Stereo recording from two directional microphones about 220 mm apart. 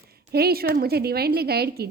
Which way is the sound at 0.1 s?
45° right (ahead or behind).